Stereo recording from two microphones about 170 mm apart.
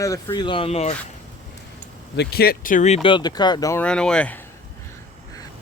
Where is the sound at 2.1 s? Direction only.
80° left; by 3.0 s 45° left (ahead or behind).